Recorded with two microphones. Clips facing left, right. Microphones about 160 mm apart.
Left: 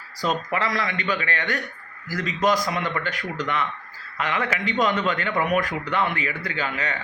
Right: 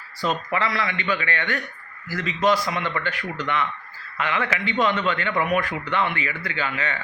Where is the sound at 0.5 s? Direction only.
40° left (ahead or behind).